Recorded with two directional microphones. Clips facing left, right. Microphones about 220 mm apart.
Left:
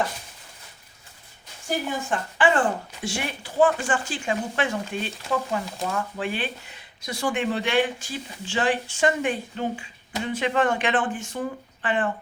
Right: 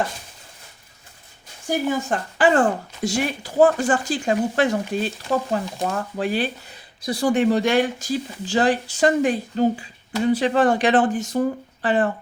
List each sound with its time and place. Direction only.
2.0 s speech: 40° right (ahead or behind)